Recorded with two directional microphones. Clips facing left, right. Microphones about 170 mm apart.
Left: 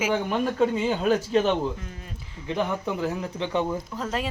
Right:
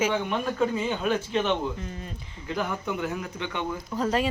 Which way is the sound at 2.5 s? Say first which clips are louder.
Left 3 dB; 30° left (ahead or behind).